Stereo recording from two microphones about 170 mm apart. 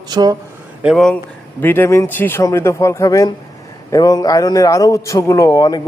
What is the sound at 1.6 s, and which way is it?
A man's voice, 10° left (ahead or behind).